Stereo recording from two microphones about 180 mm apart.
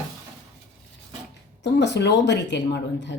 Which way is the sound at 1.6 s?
70° left (ahead or behind).